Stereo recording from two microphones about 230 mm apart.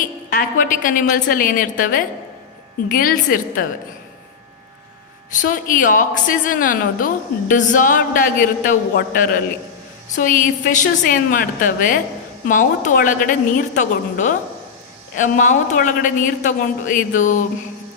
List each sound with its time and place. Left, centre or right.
0.0 s a woman's voice: left
5.4 s a woman's voice: left